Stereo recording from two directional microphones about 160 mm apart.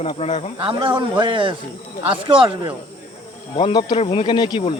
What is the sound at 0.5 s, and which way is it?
A man's voice, 30° right (ahead or behind).